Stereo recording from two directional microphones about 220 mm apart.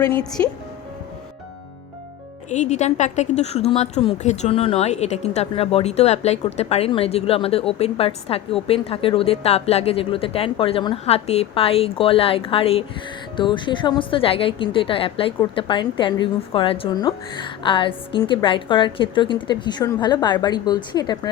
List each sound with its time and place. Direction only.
0.1 s speech: 5° left (ahead or behind)
2.5 s a woman's voice: 30° left (ahead or behind)